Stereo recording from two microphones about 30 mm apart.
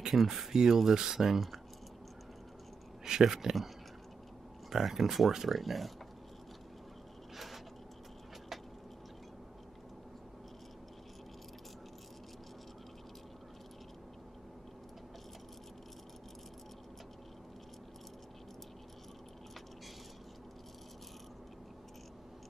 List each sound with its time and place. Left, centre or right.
0.1 s speech: centre
3.1 s speech: centre
4.6 s speech: centre
7.3 s a sound: centre